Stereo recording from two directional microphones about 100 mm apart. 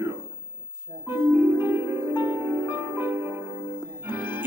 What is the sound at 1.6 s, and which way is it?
Music, 20° right (ahead or behind).